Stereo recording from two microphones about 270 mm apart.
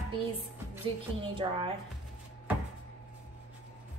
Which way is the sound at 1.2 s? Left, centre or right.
Centre.